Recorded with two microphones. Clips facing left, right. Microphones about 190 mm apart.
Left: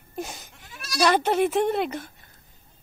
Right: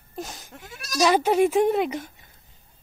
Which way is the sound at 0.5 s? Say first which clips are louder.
Right 3 dB; 45° right (ahead or behind).